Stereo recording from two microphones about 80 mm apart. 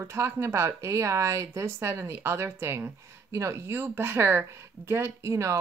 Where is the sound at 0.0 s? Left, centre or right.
Right.